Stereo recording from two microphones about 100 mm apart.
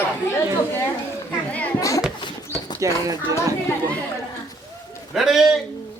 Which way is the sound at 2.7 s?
35° right (ahead or behind).